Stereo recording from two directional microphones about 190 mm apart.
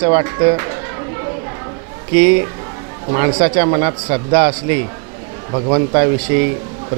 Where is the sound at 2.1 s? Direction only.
15° right (ahead or behind).